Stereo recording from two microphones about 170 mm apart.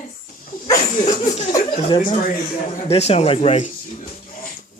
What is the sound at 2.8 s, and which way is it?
Speech, 40° left (ahead or behind).